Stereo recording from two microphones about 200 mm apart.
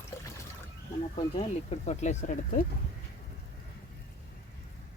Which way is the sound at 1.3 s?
35° left (ahead or behind).